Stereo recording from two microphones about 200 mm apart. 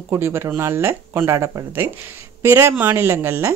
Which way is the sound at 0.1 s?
10° right (ahead or behind).